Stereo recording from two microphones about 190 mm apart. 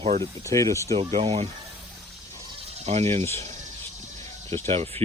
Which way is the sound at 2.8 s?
35° right (ahead or behind).